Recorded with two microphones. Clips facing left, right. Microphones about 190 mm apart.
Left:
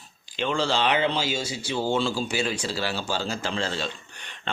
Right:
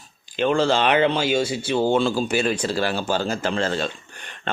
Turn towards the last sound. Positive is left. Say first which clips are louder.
# right 5 dB
turn(degrees=-50)  # may be behind; listen again after turning